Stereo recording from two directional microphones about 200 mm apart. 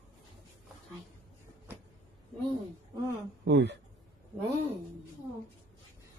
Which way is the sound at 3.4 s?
60° right (ahead or behind).